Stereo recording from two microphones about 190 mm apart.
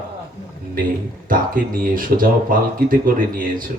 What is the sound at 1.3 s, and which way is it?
Speech, 45° right (ahead or behind).